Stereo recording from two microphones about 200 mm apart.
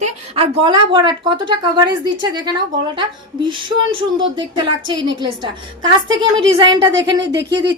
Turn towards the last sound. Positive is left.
turn(degrees=-60)  # may be behind; listen again after turning